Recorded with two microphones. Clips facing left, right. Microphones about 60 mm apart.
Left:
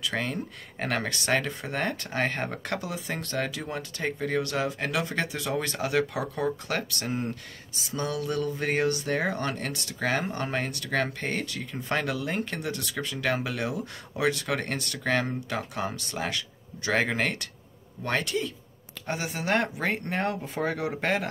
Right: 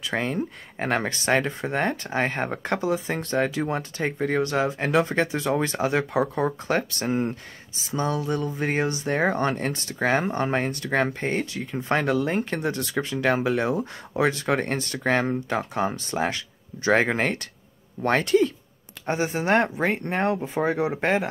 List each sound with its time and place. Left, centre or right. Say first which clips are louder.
0.0 s speech: right 4 dB; right
19.0 s speech: right 6 dB; right